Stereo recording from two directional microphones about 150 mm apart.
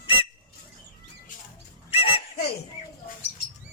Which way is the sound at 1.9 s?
40° left (ahead or behind).